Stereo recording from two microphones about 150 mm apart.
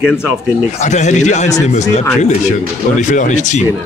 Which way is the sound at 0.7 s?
50° left (ahead or behind).